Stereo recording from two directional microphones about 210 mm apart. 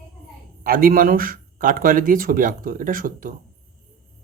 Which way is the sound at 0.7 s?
40° right (ahead or behind).